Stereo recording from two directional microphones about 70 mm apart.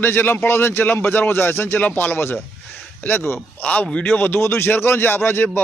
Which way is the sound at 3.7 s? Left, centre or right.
Centre.